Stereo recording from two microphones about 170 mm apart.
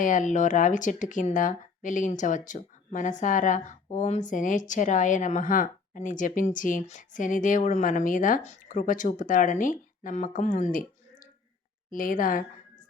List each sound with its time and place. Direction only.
0.0 s speech: 50° left (ahead or behind)
11.9 s speech: 55° left (ahead or behind)